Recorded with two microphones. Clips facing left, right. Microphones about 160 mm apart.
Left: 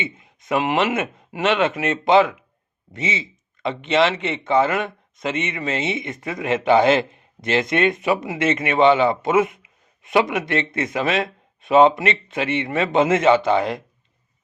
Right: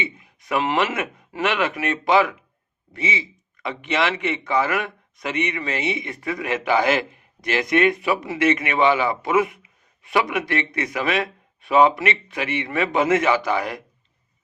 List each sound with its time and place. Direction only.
0.0 s speech: 20° left (ahead or behind)